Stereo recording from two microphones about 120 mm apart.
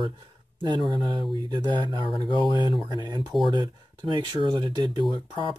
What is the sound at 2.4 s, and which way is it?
Speech, 40° left (ahead or behind).